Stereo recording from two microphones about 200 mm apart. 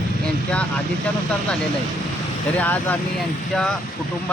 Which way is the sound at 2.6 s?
10° left (ahead or behind).